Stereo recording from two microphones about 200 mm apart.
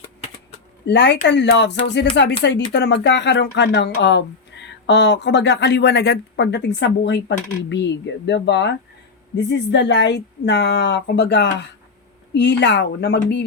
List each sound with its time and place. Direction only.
0.9 s speech: 60° left (ahead or behind)